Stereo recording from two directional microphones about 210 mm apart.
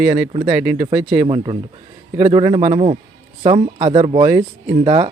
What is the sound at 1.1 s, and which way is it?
A man's voice, 20° right (ahead or behind).